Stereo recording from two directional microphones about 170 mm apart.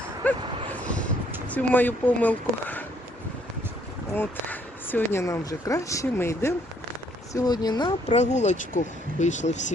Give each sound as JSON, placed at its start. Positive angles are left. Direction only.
{"t": 0.2, "sound": "speech", "side_deg": 10}
{"t": 1.5, "sound": "speech", "side_deg": 10}
{"t": 4.1, "sound": "speech", "side_deg": 10}
{"t": 8.0, "sound": "speech", "side_deg": 40}